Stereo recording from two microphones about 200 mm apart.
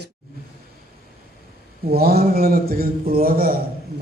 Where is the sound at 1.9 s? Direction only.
50° right (ahead or behind).